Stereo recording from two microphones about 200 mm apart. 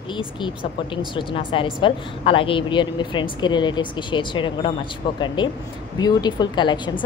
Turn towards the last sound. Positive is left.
turn(degrees=20)  # may be behind; listen again after turning